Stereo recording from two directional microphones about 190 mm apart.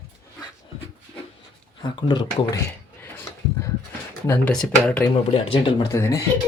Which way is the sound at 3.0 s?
10° left (ahead or behind).